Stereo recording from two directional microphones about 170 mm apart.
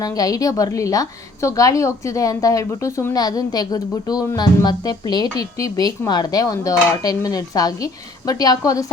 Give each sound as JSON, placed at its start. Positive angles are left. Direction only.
{"t": 0.0, "sound": "a woman's voice", "side_deg": 20}